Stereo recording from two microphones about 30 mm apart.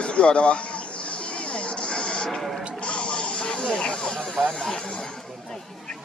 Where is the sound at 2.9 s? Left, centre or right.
Left.